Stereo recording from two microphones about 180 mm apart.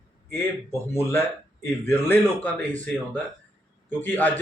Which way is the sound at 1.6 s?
10° left (ahead or behind).